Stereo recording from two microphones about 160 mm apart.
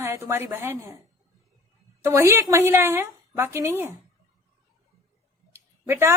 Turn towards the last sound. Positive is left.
turn(degrees=-15)  # may be behind; listen again after turning